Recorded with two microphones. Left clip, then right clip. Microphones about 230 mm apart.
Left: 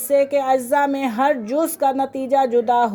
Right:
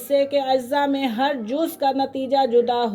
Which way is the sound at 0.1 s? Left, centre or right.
Left.